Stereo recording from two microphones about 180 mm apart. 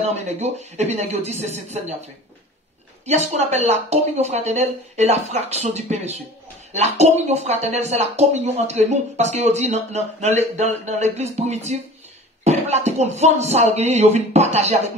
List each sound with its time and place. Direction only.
0.0 s speech: 35° right (ahead or behind)
3.1 s speech: 40° right (ahead or behind)